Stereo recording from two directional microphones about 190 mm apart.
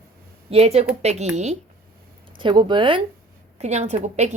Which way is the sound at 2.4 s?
25° right (ahead or behind).